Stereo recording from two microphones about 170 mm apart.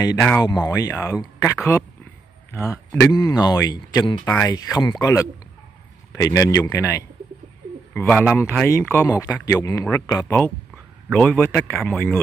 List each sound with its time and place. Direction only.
0.0 s speech: 20° left (ahead or behind); by 12.2 s 5° left (ahead or behind)